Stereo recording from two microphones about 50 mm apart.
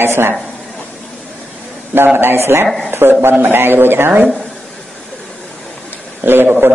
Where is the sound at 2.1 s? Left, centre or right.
Right.